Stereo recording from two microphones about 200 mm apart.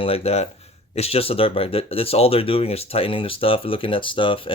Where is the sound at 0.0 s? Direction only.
30° left (ahead or behind).